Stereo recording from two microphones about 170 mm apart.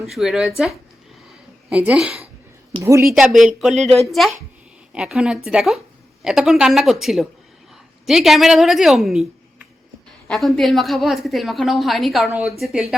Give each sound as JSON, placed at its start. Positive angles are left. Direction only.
{"t": 0.0, "sound": "a woman's voice", "side_deg": 0}
{"t": 2.8, "sound": "speech", "side_deg": -15}
{"t": 3.1, "sound": "a woman's voice", "side_deg": 0}